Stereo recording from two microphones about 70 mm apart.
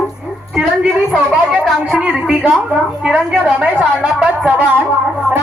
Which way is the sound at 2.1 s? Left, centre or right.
Centre.